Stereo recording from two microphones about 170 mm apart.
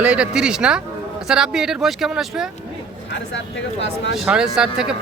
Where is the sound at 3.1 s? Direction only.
90° left.